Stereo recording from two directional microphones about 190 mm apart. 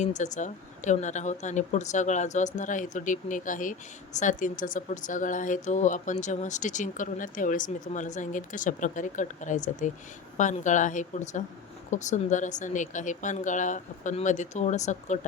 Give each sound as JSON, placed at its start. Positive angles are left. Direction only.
{"t": 0.0, "sound": "speech", "side_deg": 40}